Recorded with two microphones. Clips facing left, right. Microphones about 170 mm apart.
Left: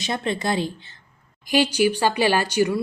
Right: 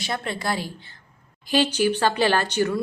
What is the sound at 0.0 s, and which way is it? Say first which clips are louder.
A woman's voice: left 3 dB; 20° left (ahead or behind).